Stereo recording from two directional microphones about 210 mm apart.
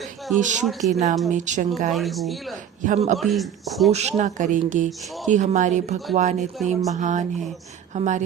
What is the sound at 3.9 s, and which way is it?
Speech, 30° right (ahead or behind).